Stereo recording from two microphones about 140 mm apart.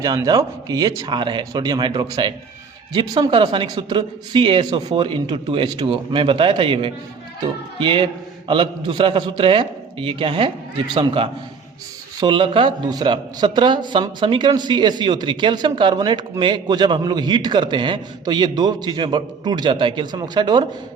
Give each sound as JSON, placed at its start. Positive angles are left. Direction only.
{"t": 0.0, "sound": "a man's voice", "side_deg": -30}